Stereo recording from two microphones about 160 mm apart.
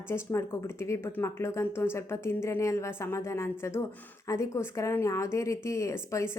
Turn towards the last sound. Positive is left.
turn(degrees=20)  # may be behind; listen again after turning